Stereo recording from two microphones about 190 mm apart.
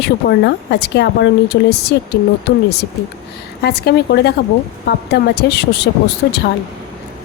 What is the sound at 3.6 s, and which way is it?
Speech, 60° left (ahead or behind).